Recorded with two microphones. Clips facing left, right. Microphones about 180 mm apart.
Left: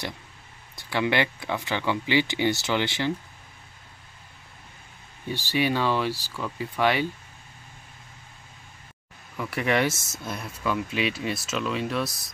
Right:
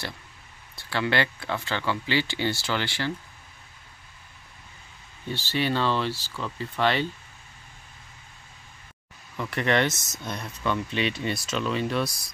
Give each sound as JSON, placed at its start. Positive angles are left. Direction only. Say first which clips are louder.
{"t": 0.7, "sound": "speech", "louder": "left 1 dB", "side_deg": 15}
{"t": 5.3, "sound": "speech", "louder": "left 2 dB", "side_deg": 15}
{"t": 9.4, "sound": "speech", "louder": "even", "side_deg": 5}